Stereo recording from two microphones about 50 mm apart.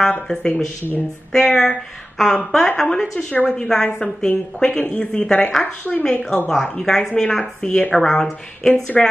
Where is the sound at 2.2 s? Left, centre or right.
Centre.